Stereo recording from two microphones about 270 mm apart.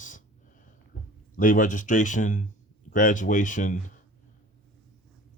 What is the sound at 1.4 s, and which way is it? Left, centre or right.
Speech, left.